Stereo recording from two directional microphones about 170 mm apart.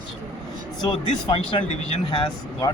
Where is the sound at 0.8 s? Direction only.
30° left (ahead or behind).